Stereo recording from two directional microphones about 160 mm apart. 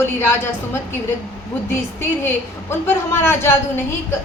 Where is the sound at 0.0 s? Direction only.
15° left (ahead or behind).